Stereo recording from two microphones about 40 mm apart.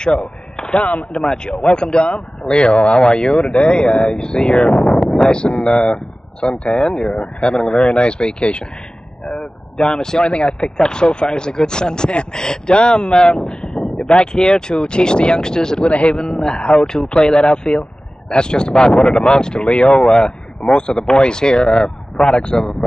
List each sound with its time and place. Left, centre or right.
0.0 s a sound: left
1.1 s speech: centre
9.2 s vehicle: left
10.4 s speech: centre
15.9 s speech: left